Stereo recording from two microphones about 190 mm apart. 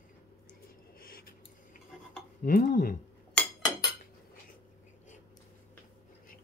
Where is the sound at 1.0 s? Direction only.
50° left (ahead or behind).